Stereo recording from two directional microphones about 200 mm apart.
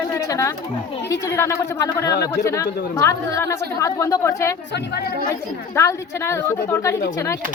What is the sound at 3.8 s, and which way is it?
Speech, 15° left (ahead or behind).